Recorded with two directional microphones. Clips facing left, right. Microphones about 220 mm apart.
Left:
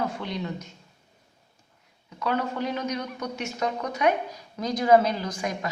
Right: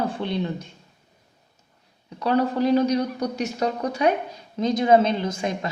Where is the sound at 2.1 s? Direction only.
35° right (ahead or behind).